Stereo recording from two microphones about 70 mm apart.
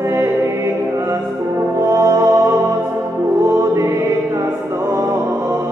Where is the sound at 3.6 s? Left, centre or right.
Right.